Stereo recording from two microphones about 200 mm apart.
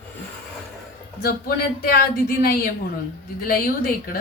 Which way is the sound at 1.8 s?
50° left (ahead or behind).